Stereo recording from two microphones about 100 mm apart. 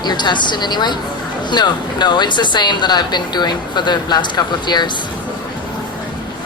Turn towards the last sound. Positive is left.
turn(degrees=45)  # may be behind; listen again after turning